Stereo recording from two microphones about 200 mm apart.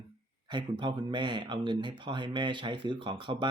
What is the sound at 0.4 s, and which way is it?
Speech, 20° right (ahead or behind).